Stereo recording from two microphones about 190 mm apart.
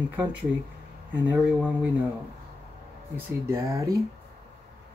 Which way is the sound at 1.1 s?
10° right (ahead or behind).